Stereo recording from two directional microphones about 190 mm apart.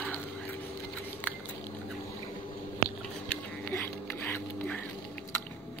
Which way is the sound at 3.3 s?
10° left (ahead or behind).